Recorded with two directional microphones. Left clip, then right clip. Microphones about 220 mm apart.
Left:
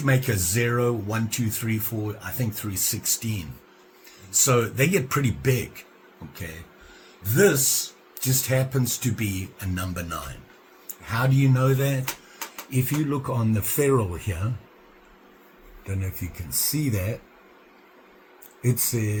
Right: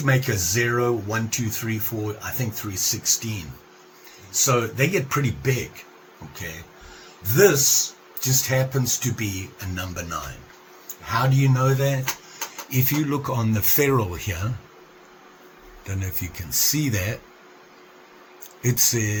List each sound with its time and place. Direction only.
0.0 s speech: 15° left (ahead or behind)
7.3 s speech: 15° left (ahead or behind)
12.7 s speech: centre (ahead or behind)
15.9 s speech: 10° right (ahead or behind)
18.6 s speech: 5° left (ahead or behind)